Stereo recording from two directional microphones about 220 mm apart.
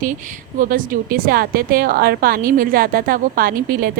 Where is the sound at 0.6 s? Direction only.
40° right (ahead or behind).